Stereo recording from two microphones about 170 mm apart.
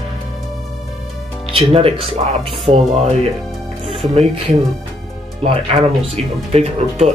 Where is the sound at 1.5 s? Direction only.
35° right (ahead or behind).